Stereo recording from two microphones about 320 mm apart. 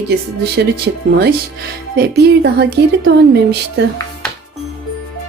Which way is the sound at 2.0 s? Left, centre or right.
Right.